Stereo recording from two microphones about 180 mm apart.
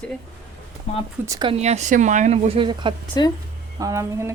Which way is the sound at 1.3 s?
25° right (ahead or behind).